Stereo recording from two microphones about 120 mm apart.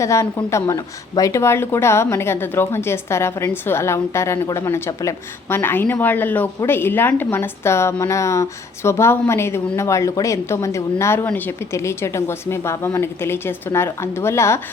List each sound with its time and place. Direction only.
0.0 s speech: 25° left (ahead or behind)